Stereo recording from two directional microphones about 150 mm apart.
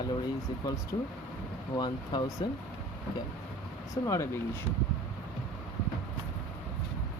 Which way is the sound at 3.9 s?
20° left (ahead or behind).